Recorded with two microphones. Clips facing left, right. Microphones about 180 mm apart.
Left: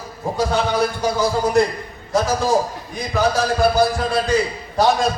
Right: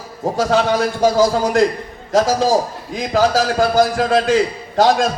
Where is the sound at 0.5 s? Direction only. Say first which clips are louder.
Right 4 dB; 90° right.